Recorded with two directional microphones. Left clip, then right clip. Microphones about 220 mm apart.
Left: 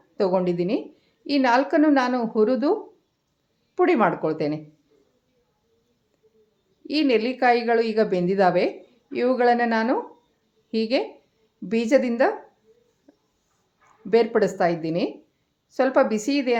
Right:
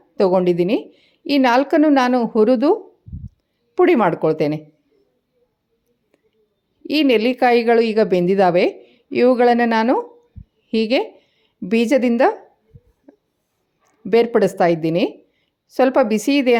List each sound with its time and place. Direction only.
0.2 s a woman's voice: 35° right (ahead or behind)
3.8 s a woman's voice: 35° right (ahead or behind)
6.8 s a woman's voice: 35° right (ahead or behind)
13.1 s a sound: 35° right (ahead or behind)
13.8 s a woman's voice: 35° right (ahead or behind)